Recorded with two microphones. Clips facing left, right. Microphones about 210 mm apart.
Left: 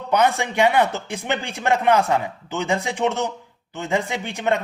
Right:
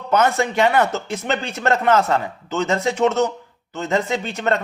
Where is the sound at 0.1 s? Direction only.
15° left (ahead or behind).